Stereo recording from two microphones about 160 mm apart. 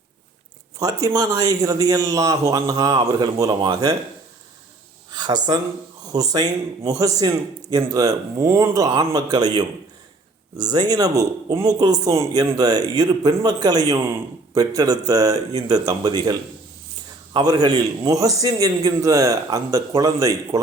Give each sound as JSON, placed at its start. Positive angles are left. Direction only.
{"t": 0.8, "sound": "speech", "side_deg": -20}
{"t": 5.1, "sound": "speech", "side_deg": -25}